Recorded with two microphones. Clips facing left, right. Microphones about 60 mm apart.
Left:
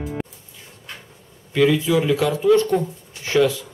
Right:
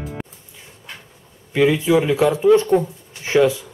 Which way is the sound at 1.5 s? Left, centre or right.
Centre.